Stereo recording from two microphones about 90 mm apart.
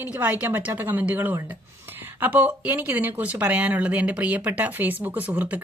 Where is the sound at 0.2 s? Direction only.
20° right (ahead or behind).